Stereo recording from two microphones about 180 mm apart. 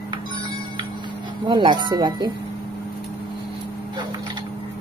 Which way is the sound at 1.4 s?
25° right (ahead or behind).